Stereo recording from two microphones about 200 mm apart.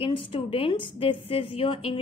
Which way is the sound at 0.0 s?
25° left (ahead or behind).